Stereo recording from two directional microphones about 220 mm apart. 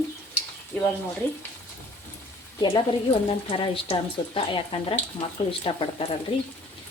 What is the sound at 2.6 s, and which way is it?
Speech, 20° left (ahead or behind).